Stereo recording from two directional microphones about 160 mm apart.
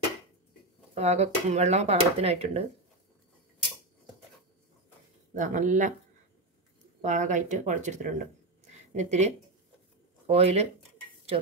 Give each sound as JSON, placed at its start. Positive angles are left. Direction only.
{"t": 0.9, "sound": "speech", "side_deg": -45}
{"t": 5.3, "sound": "speech", "side_deg": -50}
{"t": 7.0, "sound": "speech", "side_deg": -50}